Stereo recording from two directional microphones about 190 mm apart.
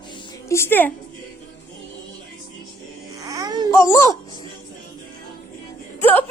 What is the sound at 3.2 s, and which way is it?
Babbling, 20° right (ahead or behind).